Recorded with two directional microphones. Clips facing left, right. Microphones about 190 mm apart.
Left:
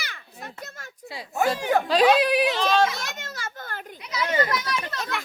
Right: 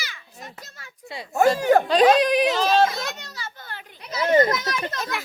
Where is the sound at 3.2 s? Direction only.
50° left (ahead or behind).